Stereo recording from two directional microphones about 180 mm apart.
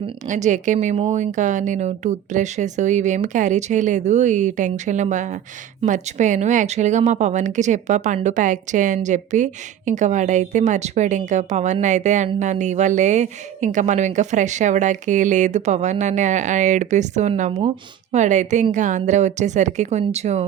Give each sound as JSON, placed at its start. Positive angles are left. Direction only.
{"t": 0.3, "sound": "a woman's voice", "side_deg": -40}